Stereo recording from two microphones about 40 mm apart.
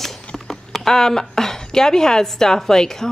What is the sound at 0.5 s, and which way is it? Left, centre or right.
Speech, centre.